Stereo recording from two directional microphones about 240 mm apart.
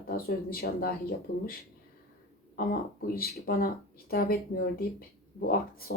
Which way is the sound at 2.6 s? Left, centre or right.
Left.